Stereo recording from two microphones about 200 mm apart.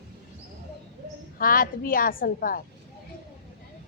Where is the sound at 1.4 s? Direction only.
45° left (ahead or behind).